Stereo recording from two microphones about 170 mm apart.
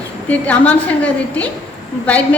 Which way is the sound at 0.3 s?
10° left (ahead or behind).